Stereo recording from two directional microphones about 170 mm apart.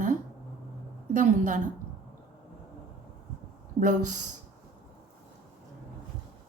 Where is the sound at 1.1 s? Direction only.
50° right (ahead or behind).